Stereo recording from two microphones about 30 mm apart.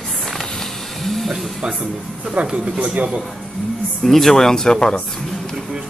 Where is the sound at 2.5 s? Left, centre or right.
Right.